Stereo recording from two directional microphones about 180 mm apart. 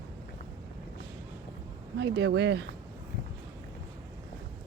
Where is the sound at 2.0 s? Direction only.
70° right (ahead or behind).